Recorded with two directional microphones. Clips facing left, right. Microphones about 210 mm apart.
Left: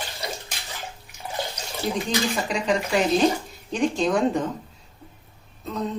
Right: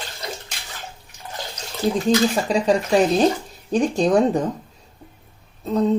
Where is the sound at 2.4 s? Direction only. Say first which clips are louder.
Right 7 dB; 35° right (ahead or behind).